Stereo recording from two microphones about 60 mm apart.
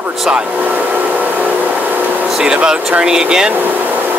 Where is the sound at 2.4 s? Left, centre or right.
Centre.